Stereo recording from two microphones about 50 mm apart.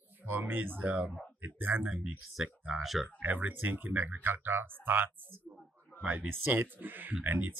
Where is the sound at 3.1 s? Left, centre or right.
Right.